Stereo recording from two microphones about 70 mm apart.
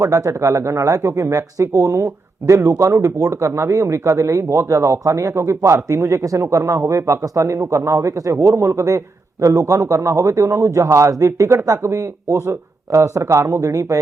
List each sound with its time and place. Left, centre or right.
0.0 s speech: right
0.3 s speech: right